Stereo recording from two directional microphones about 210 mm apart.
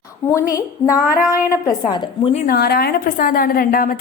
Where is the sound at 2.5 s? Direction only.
50° left (ahead or behind).